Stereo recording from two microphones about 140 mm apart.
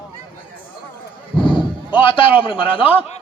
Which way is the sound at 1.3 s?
35° left (ahead or behind).